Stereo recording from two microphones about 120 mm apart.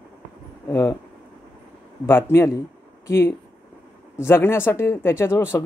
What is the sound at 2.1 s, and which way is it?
Speech, 20° left (ahead or behind).